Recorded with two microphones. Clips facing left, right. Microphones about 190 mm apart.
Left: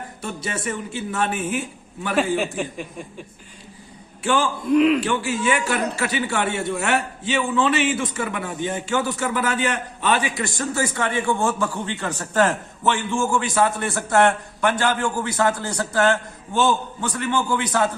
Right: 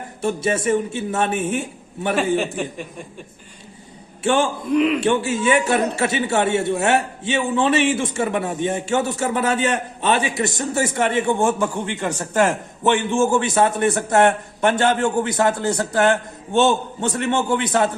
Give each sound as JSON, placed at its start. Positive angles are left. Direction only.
{"t": 0.2, "sound": "a man's voice", "side_deg": -25}
{"t": 2.1, "sound": "a man's voice", "side_deg": 0}
{"t": 4.2, "sound": "a man's voice", "side_deg": -25}
{"t": 4.7, "sound": "a man's voice", "side_deg": 0}
{"t": 4.9, "sound": "a man's voice", "side_deg": -25}